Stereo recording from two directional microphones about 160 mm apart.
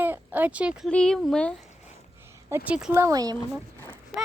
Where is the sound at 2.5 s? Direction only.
10° right (ahead or behind).